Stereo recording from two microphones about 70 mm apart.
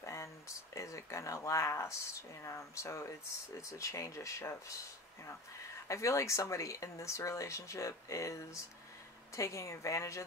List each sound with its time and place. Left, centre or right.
0.0 s a sound: left
2.4 s speech: left
5.9 s speech: left